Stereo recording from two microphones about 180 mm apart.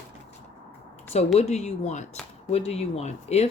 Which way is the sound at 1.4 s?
40° left (ahead or behind).